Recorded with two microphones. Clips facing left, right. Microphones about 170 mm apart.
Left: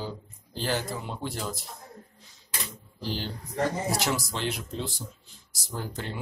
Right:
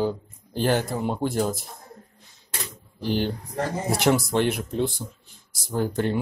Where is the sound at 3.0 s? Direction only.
55° right (ahead or behind).